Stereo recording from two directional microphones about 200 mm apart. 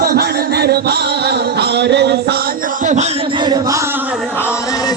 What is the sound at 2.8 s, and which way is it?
Music, 35° right (ahead or behind).